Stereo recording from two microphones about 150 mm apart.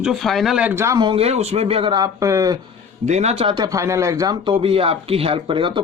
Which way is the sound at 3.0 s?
50° right (ahead or behind).